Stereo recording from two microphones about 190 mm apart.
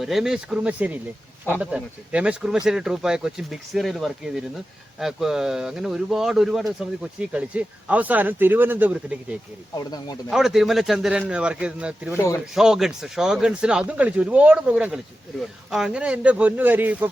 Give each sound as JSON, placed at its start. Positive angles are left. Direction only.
{"t": 0.0, "sound": "speech", "side_deg": 0}
{"t": 9.7, "sound": "speech", "side_deg": 20}
{"t": 10.2, "sound": "speech", "side_deg": 0}
{"t": 12.1, "sound": "speech", "side_deg": 15}
{"t": 12.5, "sound": "speech", "side_deg": -5}